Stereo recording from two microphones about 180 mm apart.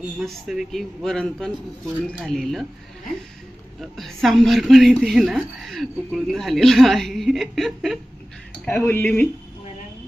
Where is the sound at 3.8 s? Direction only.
Centre (ahead or behind).